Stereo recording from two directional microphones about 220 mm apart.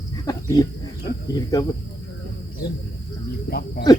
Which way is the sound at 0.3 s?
15° left (ahead or behind).